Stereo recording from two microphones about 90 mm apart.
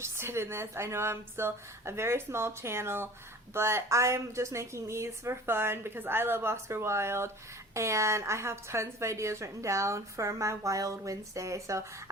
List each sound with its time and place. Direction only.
0.0 s a woman's voice: 30° right (ahead or behind)